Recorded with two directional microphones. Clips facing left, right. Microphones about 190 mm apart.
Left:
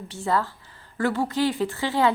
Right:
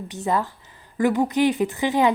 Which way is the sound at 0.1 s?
20° right (ahead or behind).